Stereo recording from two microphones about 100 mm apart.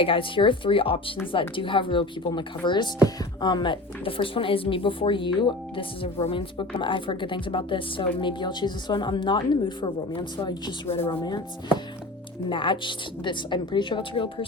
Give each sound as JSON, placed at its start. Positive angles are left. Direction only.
{"t": 0.0, "sound": "a woman's voice", "side_deg": 60}
{"t": 12.5, "sound": "a woman's voice", "side_deg": 55}